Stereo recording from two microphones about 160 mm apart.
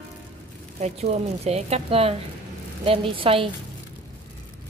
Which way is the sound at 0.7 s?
45° right (ahead or behind).